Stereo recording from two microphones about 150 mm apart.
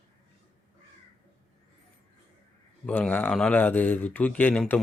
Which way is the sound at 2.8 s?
10° left (ahead or behind).